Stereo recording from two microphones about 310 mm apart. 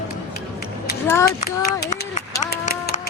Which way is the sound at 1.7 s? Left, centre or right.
Left.